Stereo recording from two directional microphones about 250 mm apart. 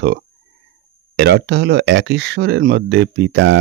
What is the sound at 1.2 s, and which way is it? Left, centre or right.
Speech, right.